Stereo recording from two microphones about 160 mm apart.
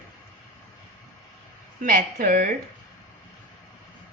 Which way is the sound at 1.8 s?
55° right (ahead or behind).